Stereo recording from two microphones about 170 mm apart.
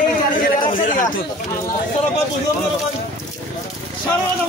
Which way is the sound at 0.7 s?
50° left (ahead or behind).